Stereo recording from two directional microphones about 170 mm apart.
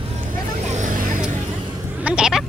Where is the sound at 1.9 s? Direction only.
5° right (ahead or behind).